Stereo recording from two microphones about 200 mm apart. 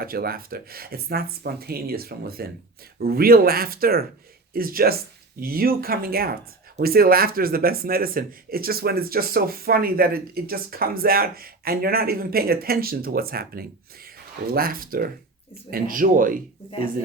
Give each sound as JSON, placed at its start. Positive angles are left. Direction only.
{"t": 0.0, "sound": "speech", "side_deg": -50}